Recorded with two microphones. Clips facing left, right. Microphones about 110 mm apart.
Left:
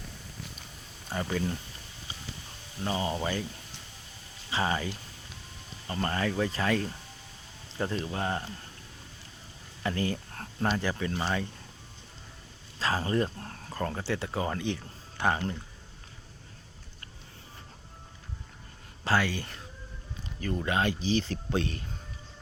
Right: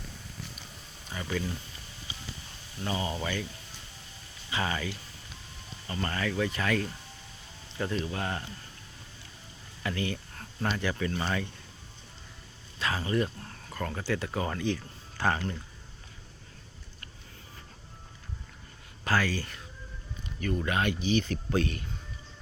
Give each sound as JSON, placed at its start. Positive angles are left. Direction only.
{"t": 1.1, "sound": "speech", "side_deg": 40}
{"t": 2.8, "sound": "speech", "side_deg": 30}
{"t": 4.5, "sound": "speech", "side_deg": 30}
{"t": 5.9, "sound": "speech", "side_deg": 30}
{"t": 9.8, "sound": "a sound", "side_deg": 35}
{"t": 10.6, "sound": "speech", "side_deg": 30}
{"t": 12.8, "sound": "speech", "side_deg": 35}
{"t": 19.0, "sound": "speech", "side_deg": 25}
{"t": 20.7, "sound": "speech", "side_deg": 25}